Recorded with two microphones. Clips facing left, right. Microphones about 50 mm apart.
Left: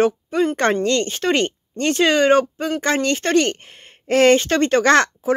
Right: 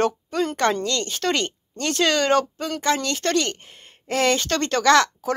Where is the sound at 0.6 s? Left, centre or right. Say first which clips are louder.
Left 4 dB; left.